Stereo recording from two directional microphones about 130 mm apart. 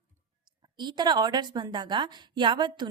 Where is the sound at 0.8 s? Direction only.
35° right (ahead or behind).